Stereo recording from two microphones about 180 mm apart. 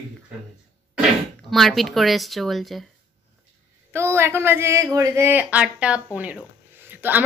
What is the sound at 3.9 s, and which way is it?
Speech, 15° right (ahead or behind).